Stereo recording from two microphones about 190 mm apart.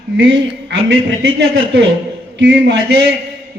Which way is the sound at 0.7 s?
65° right (ahead or behind).